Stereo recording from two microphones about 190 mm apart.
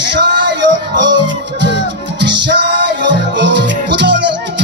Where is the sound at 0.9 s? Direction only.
70° right (ahead or behind).